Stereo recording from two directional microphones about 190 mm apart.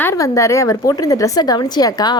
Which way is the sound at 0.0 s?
15° left (ahead or behind).